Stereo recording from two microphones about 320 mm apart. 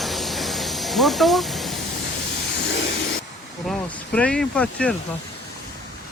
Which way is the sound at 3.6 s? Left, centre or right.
Centre.